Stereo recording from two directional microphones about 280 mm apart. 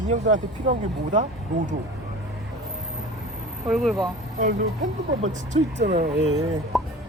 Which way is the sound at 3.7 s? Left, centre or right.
Centre.